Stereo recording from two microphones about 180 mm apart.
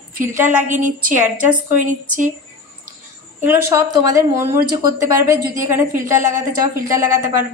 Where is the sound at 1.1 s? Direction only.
10° right (ahead or behind).